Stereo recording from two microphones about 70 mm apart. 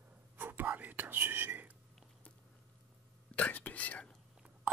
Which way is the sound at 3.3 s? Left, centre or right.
Left.